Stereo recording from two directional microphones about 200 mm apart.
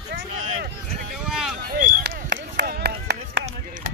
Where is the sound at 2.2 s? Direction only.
60° right (ahead or behind).